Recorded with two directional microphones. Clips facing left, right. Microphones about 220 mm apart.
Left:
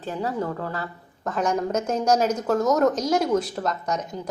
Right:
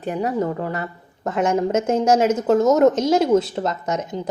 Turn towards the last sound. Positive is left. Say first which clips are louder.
# right 3 dB
turn(degrees=-25)  # may be behind; listen again after turning